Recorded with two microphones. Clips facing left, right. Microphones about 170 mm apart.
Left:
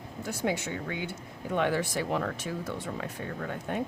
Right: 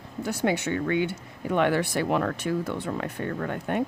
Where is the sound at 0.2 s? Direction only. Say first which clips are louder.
Right 5 dB; 70° right (ahead or behind).